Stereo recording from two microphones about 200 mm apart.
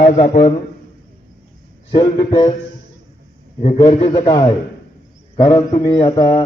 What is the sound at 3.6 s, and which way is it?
A man's voice, 30° left (ahead or behind).